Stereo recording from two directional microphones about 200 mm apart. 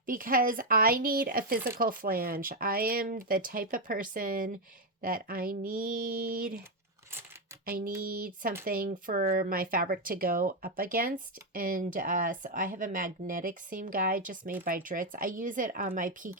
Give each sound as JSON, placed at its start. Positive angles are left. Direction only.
{"t": 0.0, "sound": "speech", "side_deg": -45}
{"t": 7.6, "sound": "a sound", "side_deg": -45}
{"t": 8.0, "sound": "speech", "side_deg": -45}